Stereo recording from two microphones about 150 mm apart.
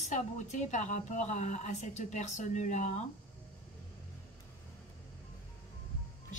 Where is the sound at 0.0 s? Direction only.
50° left (ahead or behind).